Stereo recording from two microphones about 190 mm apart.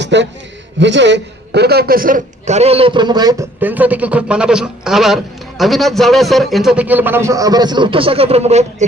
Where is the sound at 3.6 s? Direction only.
10° right (ahead or behind); by 8.6 s 35° right (ahead or behind).